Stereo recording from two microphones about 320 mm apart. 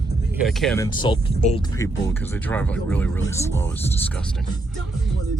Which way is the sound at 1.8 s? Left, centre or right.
Centre.